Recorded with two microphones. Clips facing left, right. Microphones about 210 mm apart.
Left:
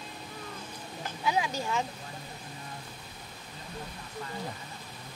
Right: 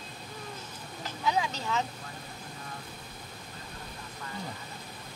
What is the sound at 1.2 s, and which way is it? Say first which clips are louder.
Speech: even; 10° left (ahead or behind).